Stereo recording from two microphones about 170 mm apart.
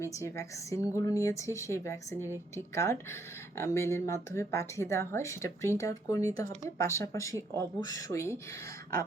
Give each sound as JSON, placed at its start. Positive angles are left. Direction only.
{"t": 0.0, "sound": "speech", "side_deg": 15}